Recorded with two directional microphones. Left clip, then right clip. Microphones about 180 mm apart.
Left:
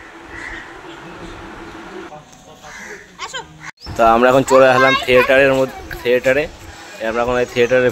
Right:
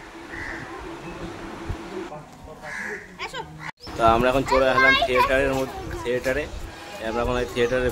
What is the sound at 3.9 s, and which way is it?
A child's voice, 45° left (ahead or behind).